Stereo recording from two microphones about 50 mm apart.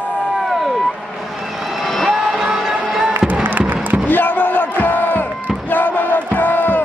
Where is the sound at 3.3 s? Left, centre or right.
Right.